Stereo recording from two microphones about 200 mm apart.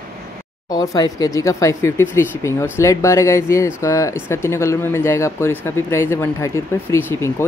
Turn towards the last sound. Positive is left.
turn(degrees=10)  # may be behind; listen again after turning